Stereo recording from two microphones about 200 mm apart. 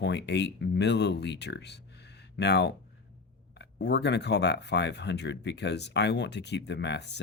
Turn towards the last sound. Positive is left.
turn(degrees=60)  # may be behind; listen again after turning